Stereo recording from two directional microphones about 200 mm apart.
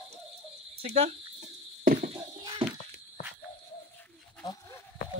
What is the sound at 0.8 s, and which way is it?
Cricket, 30° right (ahead or behind).